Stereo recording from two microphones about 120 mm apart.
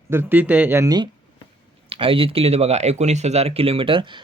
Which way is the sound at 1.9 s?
50° right (ahead or behind).